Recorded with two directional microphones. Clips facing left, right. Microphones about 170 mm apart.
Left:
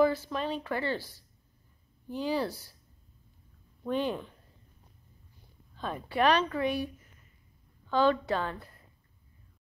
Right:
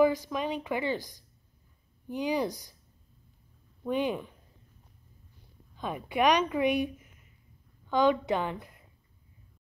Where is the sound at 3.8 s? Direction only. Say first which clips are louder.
Right 1 dB; 10° right (ahead or behind).